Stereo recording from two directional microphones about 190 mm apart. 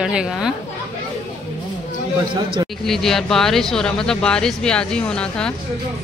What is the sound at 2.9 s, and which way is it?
Speech, centre (ahead or behind).